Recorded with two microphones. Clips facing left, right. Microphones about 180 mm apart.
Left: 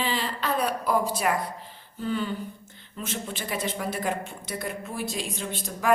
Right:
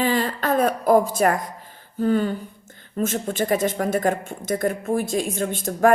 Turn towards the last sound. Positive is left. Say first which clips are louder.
# right 11 dB
turn(degrees=-50)  # may be behind; listen again after turning